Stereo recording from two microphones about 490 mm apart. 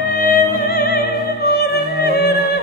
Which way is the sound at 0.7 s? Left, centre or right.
Centre.